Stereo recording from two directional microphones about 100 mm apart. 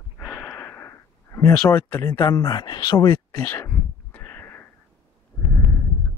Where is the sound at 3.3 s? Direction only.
25° left (ahead or behind).